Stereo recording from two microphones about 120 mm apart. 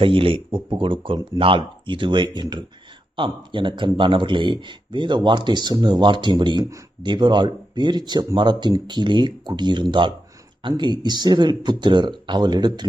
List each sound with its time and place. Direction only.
0.0 s speech: 50° right (ahead or behind)